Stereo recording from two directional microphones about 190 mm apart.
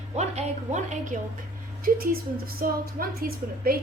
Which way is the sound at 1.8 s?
50° right (ahead or behind).